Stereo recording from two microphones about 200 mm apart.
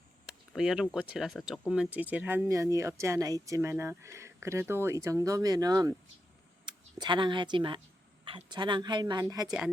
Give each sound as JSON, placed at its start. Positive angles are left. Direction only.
{"t": 0.3, "sound": "speech", "side_deg": 0}